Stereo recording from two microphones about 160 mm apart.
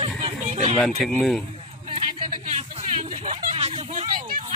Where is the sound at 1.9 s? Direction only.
35° right (ahead or behind).